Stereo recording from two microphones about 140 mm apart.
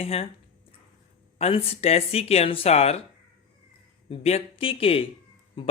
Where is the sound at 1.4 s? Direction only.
45° left (ahead or behind).